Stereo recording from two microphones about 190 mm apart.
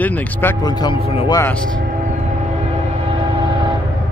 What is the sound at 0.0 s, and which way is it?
Speech, 10° left (ahead or behind).